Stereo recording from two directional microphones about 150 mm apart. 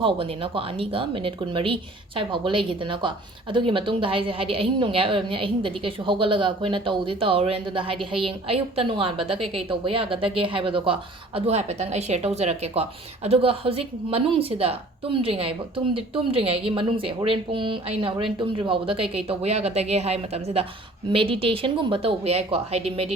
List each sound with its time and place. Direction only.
0.0 s a woman's voice: 35° right (ahead or behind)